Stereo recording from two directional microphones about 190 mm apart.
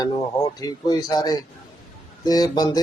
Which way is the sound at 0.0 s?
20° left (ahead or behind).